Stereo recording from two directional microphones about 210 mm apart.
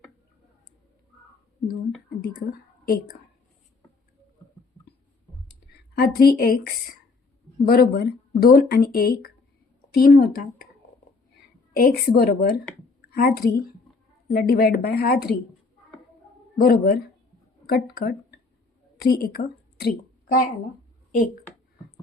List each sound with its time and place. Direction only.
2.0 s speech: 45° left (ahead or behind)
4.9 s a sound: 50° left (ahead or behind)
6.0 s speech: 45° left (ahead or behind)
7.6 s speech: 45° left (ahead or behind)
11.8 s speech: 45° left (ahead or behind)
16.6 s a woman's voice: 45° left (ahead or behind)